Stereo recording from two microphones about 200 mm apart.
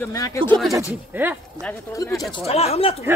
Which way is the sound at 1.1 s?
10° right (ahead or behind).